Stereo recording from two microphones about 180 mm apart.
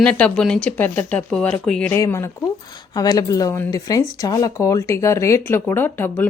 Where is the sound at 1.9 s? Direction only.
15° left (ahead or behind).